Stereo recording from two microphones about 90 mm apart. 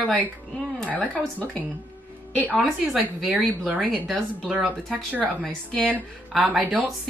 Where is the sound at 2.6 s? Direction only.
Centre (ahead or behind).